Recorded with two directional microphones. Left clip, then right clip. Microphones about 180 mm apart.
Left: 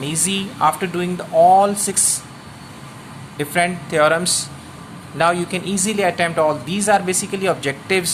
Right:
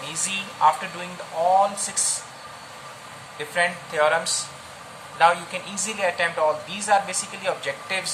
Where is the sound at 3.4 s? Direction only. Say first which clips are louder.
Left 4 dB; 60° left (ahead or behind).